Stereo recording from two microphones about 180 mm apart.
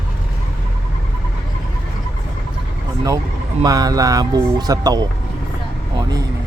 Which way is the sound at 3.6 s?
20° right (ahead or behind).